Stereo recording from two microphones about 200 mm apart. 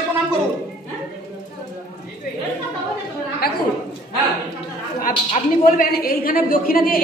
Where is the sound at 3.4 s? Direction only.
50° left (ahead or behind).